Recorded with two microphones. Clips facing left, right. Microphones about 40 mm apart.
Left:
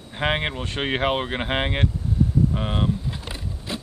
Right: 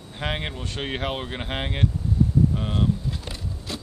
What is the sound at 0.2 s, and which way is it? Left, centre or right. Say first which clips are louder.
Speech: left 5 dB; left.